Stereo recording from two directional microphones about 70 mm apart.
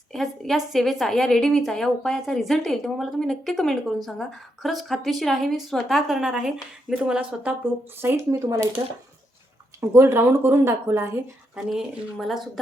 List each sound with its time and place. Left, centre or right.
0.1 s a woman's voice: centre
8.1 s speech: right
9.9 s speech: right
11.5 s a woman's voice: centre